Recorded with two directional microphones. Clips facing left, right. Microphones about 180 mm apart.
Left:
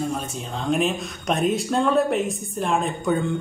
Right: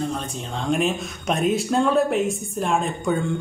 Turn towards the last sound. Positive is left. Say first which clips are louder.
# even
turn(degrees=0)  # may be behind; listen again after turning